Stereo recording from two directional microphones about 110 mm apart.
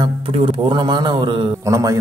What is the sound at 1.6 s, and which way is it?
Speech, 30° right (ahead or behind).